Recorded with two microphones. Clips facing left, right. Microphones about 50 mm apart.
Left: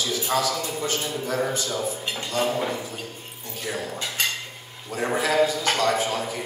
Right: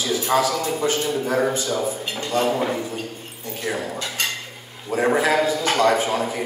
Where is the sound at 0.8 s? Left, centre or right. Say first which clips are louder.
Right 6 dB; right.